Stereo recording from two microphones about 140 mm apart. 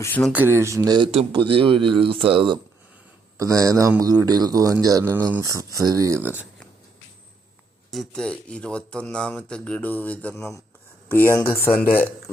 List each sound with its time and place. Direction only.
0.3 s speech: 15° right (ahead or behind)
0.9 s speech: 35° right (ahead or behind)
3.3 s speech: 25° right (ahead or behind)
7.9 s speech: centre (ahead or behind)